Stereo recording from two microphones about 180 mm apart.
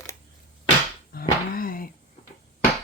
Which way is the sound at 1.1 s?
55° left (ahead or behind).